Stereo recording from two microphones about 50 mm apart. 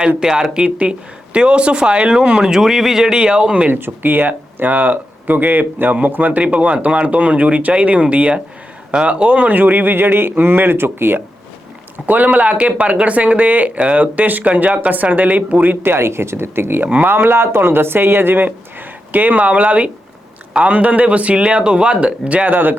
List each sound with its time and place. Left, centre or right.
0.2 s speech: centre
2.5 s speech: centre
3.7 s speech: right
12.0 s speech: right
22.4 s speech: right